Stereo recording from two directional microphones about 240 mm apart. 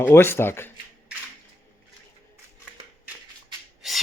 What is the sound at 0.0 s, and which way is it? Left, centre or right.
Speech, centre.